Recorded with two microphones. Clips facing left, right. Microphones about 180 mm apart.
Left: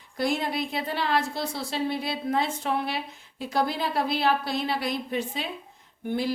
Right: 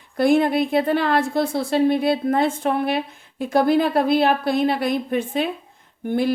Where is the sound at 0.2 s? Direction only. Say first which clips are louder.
Right 10 dB; 55° right (ahead or behind).